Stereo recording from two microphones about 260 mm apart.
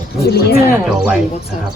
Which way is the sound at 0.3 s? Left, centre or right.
Left.